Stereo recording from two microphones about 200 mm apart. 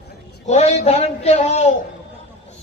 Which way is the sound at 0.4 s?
35° left (ahead or behind).